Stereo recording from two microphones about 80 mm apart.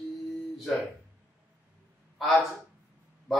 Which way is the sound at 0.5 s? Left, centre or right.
Centre.